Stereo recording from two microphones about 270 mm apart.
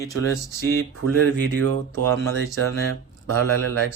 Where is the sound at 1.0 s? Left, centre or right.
Right.